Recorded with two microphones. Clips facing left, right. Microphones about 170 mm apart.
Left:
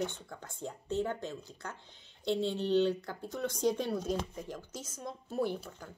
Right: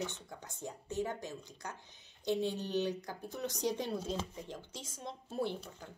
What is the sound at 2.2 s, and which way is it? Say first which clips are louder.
Speech: left 2 dB; 15° right (ahead or behind).